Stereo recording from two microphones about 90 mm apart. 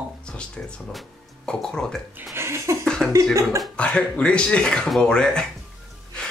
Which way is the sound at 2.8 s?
5° left (ahead or behind).